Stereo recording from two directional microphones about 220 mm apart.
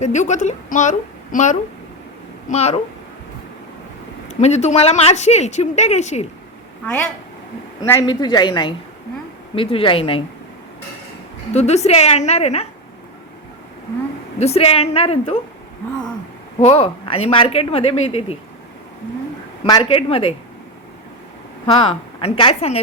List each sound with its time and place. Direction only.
0.0 s a woman's voice: 35° left (ahead or behind)
4.3 s speech: 30° left (ahead or behind)
7.8 s a woman's voice: 15° left (ahead or behind)
11.5 s a woman's voice: 30° left (ahead or behind)
14.3 s a woman's voice: 30° left (ahead or behind)
16.6 s a woman's voice: 30° left (ahead or behind)
19.6 s a woman's voice: 20° left (ahead or behind)
21.7 s a woman's voice: 25° left (ahead or behind)